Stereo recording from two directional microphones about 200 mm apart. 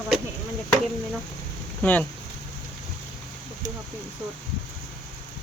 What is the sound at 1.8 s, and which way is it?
Speech, 10° left (ahead or behind).